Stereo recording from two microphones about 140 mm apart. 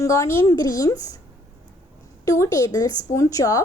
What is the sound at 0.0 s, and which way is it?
Speech, 20° left (ahead or behind).